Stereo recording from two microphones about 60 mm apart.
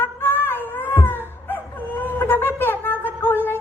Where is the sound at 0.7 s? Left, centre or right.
Left.